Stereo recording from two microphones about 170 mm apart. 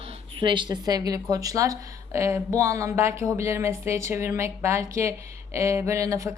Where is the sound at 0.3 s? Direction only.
30° right (ahead or behind).